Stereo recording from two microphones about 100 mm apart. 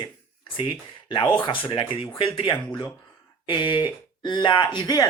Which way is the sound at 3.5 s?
50° left (ahead or behind).